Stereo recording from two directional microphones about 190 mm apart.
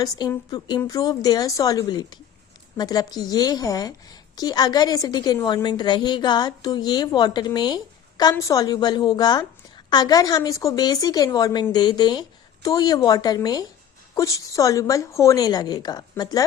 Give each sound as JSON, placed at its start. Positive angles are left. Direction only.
{"t": 0.0, "sound": "a woman's voice", "side_deg": 20}